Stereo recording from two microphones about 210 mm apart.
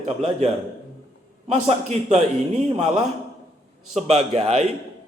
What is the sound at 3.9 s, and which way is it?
Speech, 30° right (ahead or behind).